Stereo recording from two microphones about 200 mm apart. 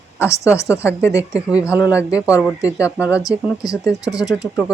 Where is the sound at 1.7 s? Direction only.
15° left (ahead or behind).